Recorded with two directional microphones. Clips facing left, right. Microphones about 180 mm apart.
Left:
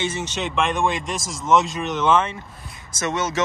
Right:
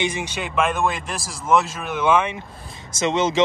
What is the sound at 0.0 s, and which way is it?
Speech, 10° right (ahead or behind).